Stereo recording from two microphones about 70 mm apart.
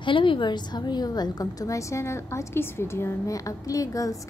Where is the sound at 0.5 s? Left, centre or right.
Left.